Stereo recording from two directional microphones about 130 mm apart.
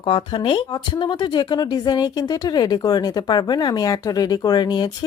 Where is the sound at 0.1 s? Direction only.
40° left (ahead or behind).